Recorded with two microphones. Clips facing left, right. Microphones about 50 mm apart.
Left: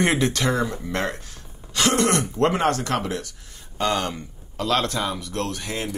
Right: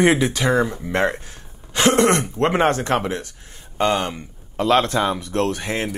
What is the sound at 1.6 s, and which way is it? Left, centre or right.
Throat clearing, right.